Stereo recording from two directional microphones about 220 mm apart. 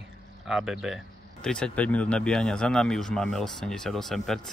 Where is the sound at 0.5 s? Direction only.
Centre (ahead or behind).